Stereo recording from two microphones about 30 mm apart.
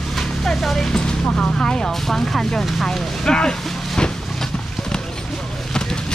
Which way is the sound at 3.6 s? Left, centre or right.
Centre.